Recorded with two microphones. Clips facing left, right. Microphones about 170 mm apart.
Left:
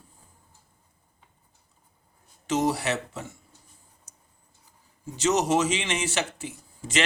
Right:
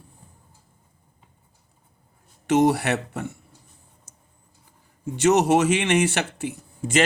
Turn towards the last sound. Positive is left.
turn(degrees=-55)  # may be behind; listen again after turning